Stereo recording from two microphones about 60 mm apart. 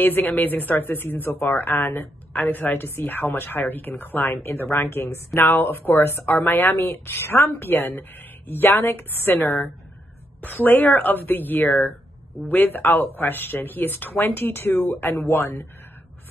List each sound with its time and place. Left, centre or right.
0.0 s speech: left
15.1 s speech: left